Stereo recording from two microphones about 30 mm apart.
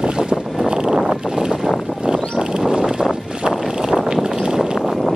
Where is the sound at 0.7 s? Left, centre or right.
Right.